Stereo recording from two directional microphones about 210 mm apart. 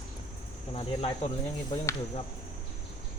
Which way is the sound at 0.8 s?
25° left (ahead or behind).